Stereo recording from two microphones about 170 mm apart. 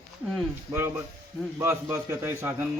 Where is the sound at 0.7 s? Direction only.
15° right (ahead or behind).